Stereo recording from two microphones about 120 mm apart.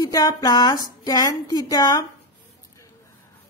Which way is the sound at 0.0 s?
30° left (ahead or behind).